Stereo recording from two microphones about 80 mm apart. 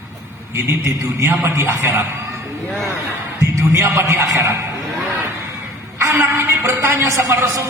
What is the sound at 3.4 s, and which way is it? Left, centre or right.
A man's voice, right.